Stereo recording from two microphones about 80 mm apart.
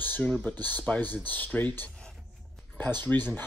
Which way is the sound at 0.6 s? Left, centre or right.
Left.